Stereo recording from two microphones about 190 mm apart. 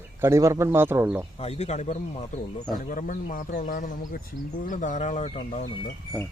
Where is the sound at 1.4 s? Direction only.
35° left (ahead or behind).